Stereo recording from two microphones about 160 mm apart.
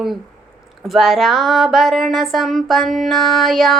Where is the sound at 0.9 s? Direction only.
Centre (ahead or behind).